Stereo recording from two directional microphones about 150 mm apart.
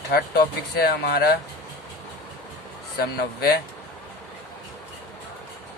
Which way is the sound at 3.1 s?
90° left.